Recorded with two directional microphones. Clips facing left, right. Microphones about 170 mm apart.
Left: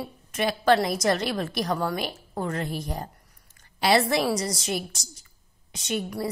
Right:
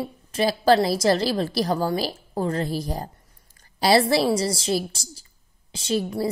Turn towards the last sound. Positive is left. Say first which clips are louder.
# right 5 dB
turn(degrees=-30)  # may be behind; listen again after turning